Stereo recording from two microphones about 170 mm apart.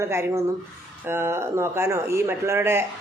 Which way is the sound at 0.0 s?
15° right (ahead or behind).